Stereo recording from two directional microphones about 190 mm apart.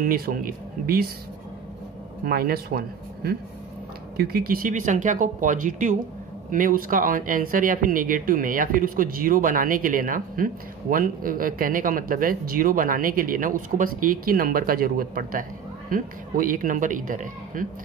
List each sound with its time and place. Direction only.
0.0 s speech: 50° right (ahead or behind)
2.2 s speech: 50° right (ahead or behind)
4.2 s speech: 50° right (ahead or behind)